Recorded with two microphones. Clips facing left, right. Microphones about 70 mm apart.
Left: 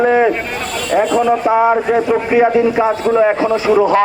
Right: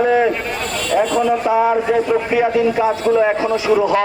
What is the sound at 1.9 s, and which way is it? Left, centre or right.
A man's voice, left.